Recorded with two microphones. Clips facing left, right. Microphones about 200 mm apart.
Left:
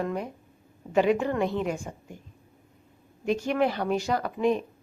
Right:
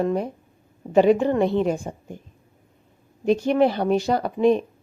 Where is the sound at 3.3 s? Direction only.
30° right (ahead or behind).